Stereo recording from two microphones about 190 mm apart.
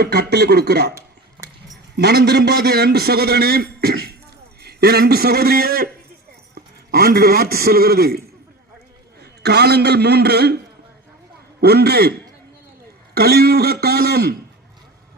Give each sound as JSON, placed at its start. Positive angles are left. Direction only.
{"t": 0.0, "sound": "a man's voice", "side_deg": -55}
{"t": 2.0, "sound": "a man's voice", "side_deg": -60}
{"t": 9.2, "sound": "a man's voice", "side_deg": -60}
{"t": 11.6, "sound": "a man's voice", "side_deg": -55}
{"t": 13.1, "sound": "a man's voice", "side_deg": -55}